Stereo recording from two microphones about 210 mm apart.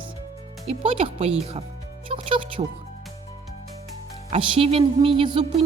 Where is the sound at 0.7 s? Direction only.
25° right (ahead or behind).